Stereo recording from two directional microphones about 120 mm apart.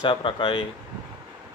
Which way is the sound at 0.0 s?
45° left (ahead or behind).